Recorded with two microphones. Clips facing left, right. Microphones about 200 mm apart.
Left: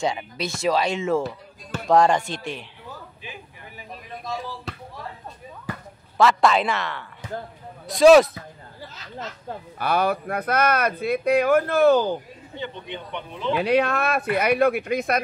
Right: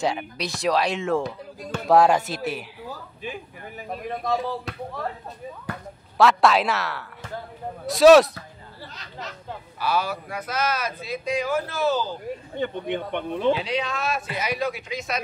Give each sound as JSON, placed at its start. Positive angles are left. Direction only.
{"t": 0.0, "sound": "speech", "side_deg": 0}
{"t": 3.3, "sound": "speech", "side_deg": -50}
{"t": 5.7, "sound": "speech", "side_deg": 0}
{"t": 9.5, "sound": "speech", "side_deg": 55}
{"t": 12.5, "sound": "a man's voice", "side_deg": -50}
{"t": 13.5, "sound": "speech", "side_deg": 55}